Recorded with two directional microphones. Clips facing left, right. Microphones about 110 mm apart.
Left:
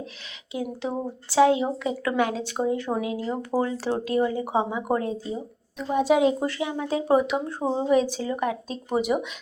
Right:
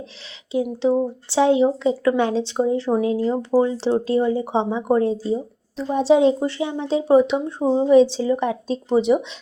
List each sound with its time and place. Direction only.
0.5 s speech: 25° right (ahead or behind)
3.6 s speech: 25° right (ahead or behind)